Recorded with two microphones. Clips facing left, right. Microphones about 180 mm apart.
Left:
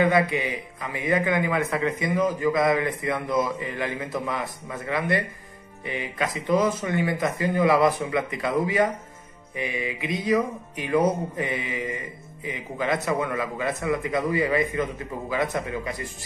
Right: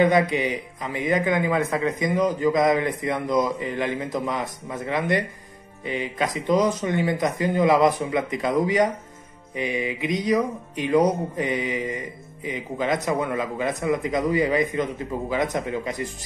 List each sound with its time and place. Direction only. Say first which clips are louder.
0.0 s a man's voice: right 2 dB; 20° right (ahead or behind)